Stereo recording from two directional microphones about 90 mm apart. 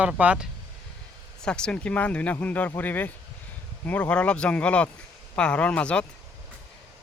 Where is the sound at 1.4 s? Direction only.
10° left (ahead or behind).